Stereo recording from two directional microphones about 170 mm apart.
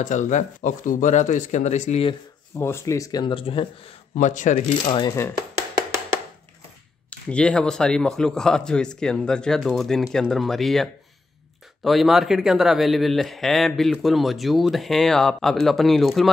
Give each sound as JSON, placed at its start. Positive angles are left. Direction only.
{"t": 0.0, "sound": "speech", "side_deg": 45}
{"t": 2.6, "sound": "speech", "side_deg": 15}
{"t": 4.3, "sound": "speech", "side_deg": 45}
{"t": 7.1, "sound": "speech", "side_deg": 5}